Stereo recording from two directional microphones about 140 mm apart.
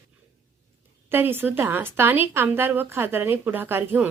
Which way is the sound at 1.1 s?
15° right (ahead or behind).